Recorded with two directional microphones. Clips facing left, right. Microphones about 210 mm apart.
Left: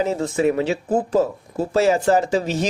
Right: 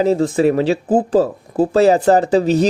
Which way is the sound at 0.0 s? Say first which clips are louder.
Right 5 dB; 35° right (ahead or behind).